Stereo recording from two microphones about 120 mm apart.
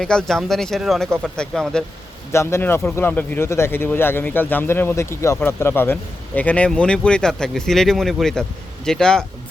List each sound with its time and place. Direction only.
0.0 s speech: 5° left (ahead or behind)
2.3 s speech: 20° left (ahead or behind); by 9.2 s 5° left (ahead or behind)